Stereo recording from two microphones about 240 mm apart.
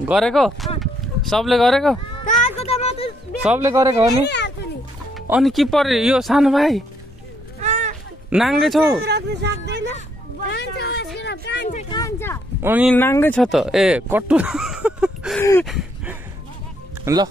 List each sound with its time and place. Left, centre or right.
0.0 s speech: centre
2.6 s speech: left
3.4 s speech: centre
5.1 s speech: centre
7.6 s a sound: right
8.3 s speech: centre
9.0 s speech: right
10.5 s a sound: left
11.9 s a sound: centre
12.6 s speech: centre
12.9 s speech: centre
15.6 s a sound: centre
17.0 s speech: centre